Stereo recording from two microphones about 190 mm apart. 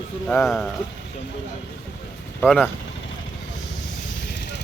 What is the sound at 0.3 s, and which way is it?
Speech, 5° left (ahead or behind).